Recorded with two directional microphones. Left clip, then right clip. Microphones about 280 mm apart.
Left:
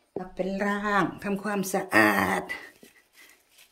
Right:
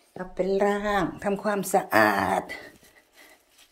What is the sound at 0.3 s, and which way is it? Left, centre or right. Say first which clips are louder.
Speech: right 6 dB; centre.